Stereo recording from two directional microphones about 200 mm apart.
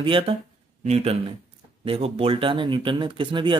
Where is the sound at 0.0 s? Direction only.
25° right (ahead or behind).